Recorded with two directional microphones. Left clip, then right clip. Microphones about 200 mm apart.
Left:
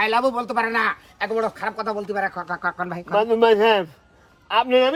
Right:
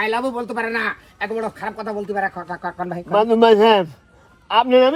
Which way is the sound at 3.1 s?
30° right (ahead or behind).